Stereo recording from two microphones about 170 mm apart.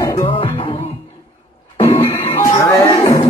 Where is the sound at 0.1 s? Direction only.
30° left (ahead or behind).